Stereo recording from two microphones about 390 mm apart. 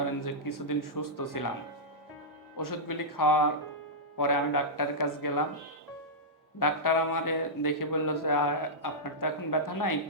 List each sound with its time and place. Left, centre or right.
0.2 s a man's voice: left
2.6 s a man's voice: left
6.6 s a man's voice: left